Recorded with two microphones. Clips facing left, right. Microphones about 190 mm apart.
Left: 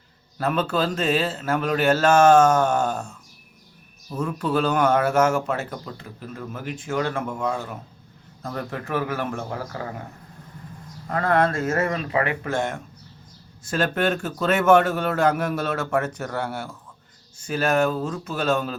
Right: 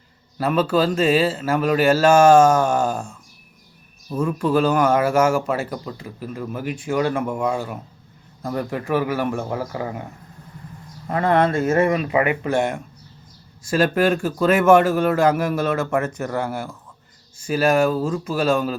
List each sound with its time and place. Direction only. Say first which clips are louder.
0.3 s speech: right 4 dB; 5° right (ahead or behind)
4.1 s speech: right 4 dB; 10° right (ahead or behind)
11.1 s speech: right 3 dB; 20° right (ahead or behind)
11.9 s speech: right 5 dB; 15° right (ahead or behind)